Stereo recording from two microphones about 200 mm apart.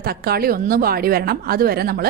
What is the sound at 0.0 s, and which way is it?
Speech, 50° right (ahead or behind).